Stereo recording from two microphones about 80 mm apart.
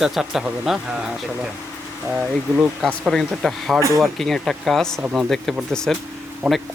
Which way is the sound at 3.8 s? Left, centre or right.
Right.